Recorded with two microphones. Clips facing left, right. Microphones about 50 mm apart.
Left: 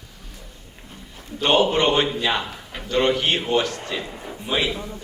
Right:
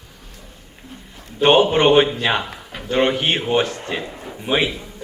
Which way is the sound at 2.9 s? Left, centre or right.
Right.